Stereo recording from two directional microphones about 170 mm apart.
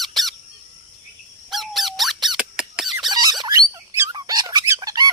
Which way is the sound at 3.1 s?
25° right (ahead or behind).